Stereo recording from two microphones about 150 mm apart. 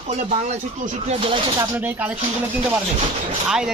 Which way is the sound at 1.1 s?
35° right (ahead or behind).